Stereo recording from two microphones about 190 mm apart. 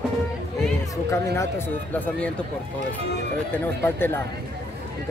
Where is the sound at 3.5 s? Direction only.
10° left (ahead or behind).